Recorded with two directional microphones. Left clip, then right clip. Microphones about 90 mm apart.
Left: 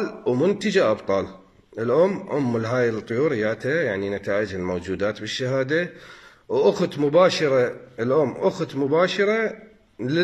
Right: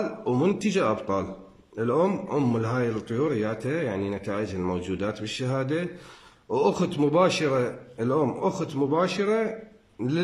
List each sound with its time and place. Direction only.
0.3 s a man's voice: 35° right (ahead or behind)
2.5 s a man's voice: 20° right (ahead or behind)